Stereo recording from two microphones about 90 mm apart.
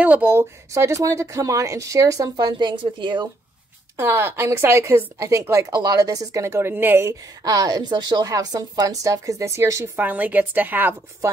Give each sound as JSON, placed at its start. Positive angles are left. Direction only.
{"t": 0.0, "sound": "speech", "side_deg": -20}
{"t": 3.9, "sound": "speech", "side_deg": -25}
{"t": 7.4, "sound": "a woman's voice", "side_deg": -45}
{"t": 9.9, "sound": "speech", "side_deg": -20}